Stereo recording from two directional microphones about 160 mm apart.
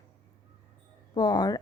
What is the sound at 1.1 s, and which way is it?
Speech, 25° left (ahead or behind).